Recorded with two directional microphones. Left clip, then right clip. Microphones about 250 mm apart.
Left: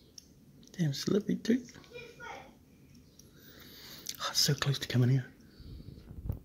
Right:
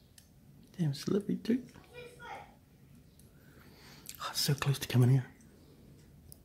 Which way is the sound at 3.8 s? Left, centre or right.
Centre.